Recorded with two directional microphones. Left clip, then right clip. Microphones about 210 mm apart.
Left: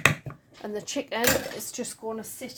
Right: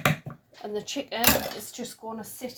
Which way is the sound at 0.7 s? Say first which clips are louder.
Left 1 dB; 35° left (ahead or behind).